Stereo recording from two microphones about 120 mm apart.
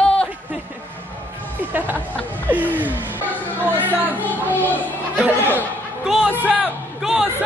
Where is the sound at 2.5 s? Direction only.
15° right (ahead or behind).